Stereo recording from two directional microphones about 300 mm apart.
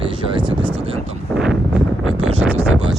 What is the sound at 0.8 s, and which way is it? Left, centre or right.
Wind noise, centre.